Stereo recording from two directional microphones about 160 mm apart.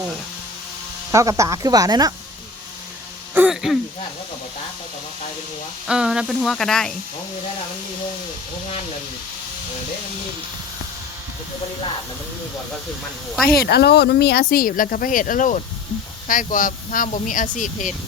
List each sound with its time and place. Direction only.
1.1 s speech: 20° right (ahead or behind)
3.3 s throat clearing: 5° right (ahead or behind)
5.9 s speech: 5° right (ahead or behind)
13.5 s speech: 80° left; by 17.9 s 50° left (ahead or behind)